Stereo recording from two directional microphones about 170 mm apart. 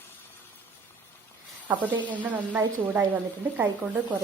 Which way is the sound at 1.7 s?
10° right (ahead or behind).